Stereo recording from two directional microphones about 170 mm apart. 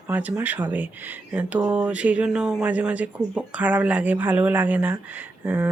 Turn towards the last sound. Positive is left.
turn(degrees=-10)  # may be behind; listen again after turning